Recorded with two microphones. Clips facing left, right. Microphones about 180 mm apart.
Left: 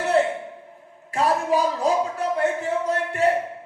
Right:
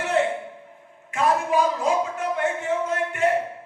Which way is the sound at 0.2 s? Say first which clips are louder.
Left 1 dB; 35° left (ahead or behind).